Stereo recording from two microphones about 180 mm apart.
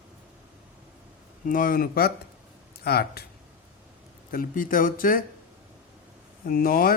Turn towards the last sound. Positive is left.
turn(degrees=55)  # may be behind; listen again after turning